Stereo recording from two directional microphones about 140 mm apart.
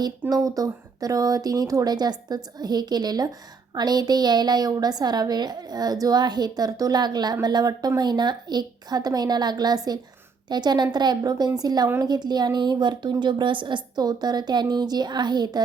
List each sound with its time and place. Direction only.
0.0 s a woman's voice: 25° right (ahead or behind)